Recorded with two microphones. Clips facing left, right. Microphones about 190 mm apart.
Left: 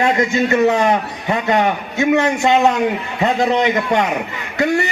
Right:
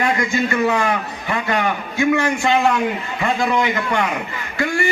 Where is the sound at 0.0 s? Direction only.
25° left (ahead or behind).